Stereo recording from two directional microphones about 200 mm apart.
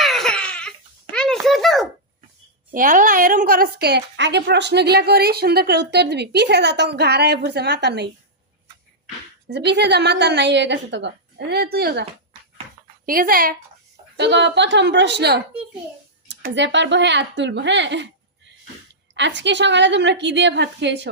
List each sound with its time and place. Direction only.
0.0 s crying: centre (ahead or behind)
1.1 s a sound: 5° left (ahead or behind)
2.7 s a woman's voice: 40° right (ahead or behind); by 8.1 s 55° right (ahead or behind)
9.5 s a woman's voice: 60° right (ahead or behind)
13.1 s speech: 45° right (ahead or behind)
14.2 s a woman's voice: 60° right (ahead or behind)
19.1 s a woman's voice: 65° right (ahead or behind)